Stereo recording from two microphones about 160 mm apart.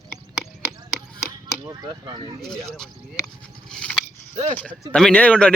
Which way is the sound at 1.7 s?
25° right (ahead or behind).